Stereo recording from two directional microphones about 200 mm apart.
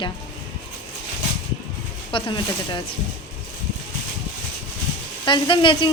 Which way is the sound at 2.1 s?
25° left (ahead or behind).